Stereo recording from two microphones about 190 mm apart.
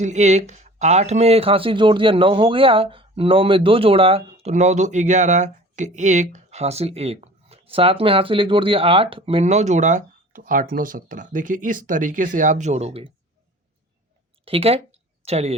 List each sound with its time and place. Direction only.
0.0 s speech: 40° right (ahead or behind)
14.4 s speech: 30° right (ahead or behind)